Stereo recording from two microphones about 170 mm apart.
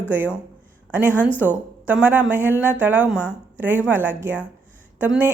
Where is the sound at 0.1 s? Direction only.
10° right (ahead or behind).